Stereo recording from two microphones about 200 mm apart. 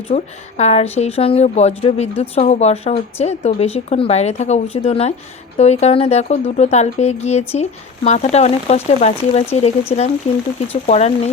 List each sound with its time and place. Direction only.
0.1 s a woman's voice: 35° left (ahead or behind)